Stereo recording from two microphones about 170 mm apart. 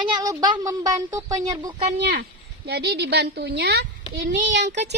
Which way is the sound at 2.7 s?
75° right (ahead or behind).